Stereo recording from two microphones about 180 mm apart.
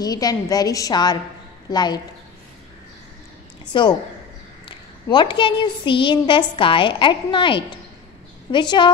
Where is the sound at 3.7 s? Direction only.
25° left (ahead or behind).